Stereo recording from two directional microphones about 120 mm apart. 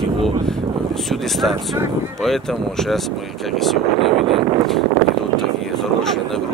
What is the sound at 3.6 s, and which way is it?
Speech, centre (ahead or behind).